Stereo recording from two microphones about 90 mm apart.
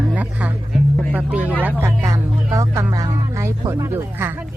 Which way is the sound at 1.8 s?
35° right (ahead or behind).